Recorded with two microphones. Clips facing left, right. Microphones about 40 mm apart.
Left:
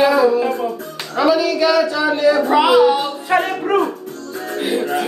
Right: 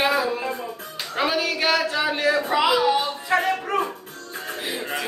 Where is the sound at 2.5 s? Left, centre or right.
Left.